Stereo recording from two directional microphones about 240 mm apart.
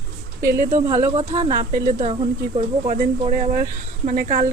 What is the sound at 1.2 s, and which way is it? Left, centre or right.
Speech, right.